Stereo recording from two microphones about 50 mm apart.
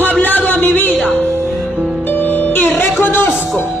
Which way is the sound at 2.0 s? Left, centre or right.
Left.